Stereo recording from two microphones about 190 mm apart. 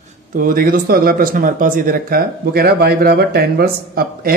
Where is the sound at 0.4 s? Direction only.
50° right (ahead or behind).